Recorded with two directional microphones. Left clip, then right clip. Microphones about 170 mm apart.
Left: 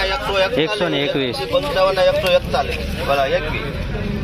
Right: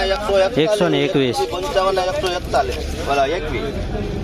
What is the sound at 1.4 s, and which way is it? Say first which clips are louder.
Speech: left 2 dB; 70° right (ahead or behind).